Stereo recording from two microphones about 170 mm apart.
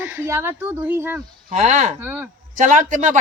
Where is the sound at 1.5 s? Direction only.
45° right (ahead or behind).